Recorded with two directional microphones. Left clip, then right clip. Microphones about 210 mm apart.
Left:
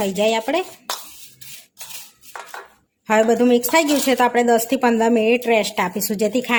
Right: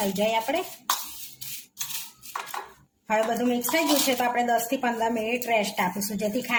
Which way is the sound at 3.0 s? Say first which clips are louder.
Left 9 dB; 55° left (ahead or behind).